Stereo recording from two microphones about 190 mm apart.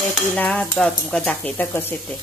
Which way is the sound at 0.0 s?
5° left (ahead or behind).